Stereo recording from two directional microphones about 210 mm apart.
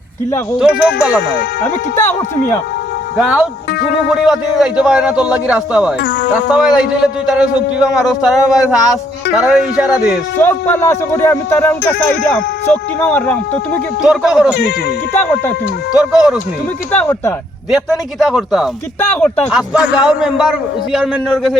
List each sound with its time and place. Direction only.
0.6 s speech: centre (ahead or behind)
3.2 s speech: 5° right (ahead or behind)
6.0 s speech: 45° left (ahead or behind)
6.3 s speech: centre (ahead or behind)
10.3 s speech: 10° left (ahead or behind)
14.0 s speech: 5° right (ahead or behind)
14.5 s speech: 50° left (ahead or behind)
15.2 s speech: 5° left (ahead or behind)
15.9 s speech: 5° right (ahead or behind)
16.9 s speech: 10° left (ahead or behind)
17.7 s speech: centre (ahead or behind)